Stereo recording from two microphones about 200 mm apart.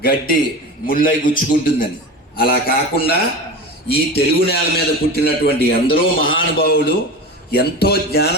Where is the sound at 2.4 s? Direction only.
50° left (ahead or behind).